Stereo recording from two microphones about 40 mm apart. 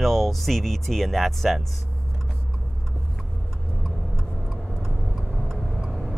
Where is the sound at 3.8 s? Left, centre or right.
Right.